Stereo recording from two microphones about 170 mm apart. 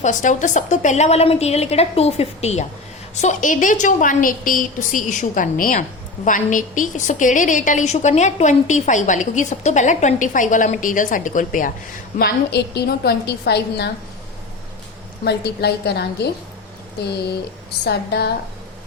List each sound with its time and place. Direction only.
0.0 s a woman's voice: 45° left (ahead or behind)
12.2 s a woman's voice: 75° left (ahead or behind)
15.2 s a woman's voice: 75° left (ahead or behind)
17.8 s a woman's voice: 70° left (ahead or behind)